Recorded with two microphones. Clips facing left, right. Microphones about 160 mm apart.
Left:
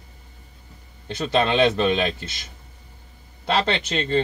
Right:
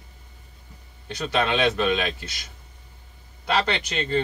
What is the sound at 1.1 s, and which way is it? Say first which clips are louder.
Speech: left 3 dB; 25° left (ahead or behind).